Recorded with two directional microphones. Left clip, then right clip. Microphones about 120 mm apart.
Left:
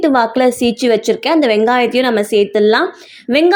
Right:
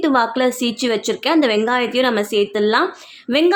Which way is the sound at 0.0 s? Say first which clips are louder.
Left 4 dB; 30° left (ahead or behind).